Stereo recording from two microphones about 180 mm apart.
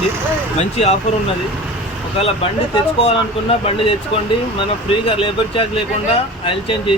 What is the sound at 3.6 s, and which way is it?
Speech, 30° left (ahead or behind).